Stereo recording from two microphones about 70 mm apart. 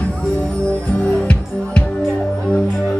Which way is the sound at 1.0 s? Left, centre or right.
Centre.